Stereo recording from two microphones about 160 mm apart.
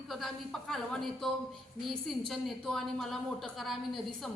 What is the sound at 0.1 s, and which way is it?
A woman's voice, centre (ahead or behind).